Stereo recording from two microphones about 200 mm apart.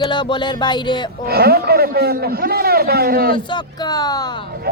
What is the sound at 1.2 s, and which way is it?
A man's voice, 50° right (ahead or behind).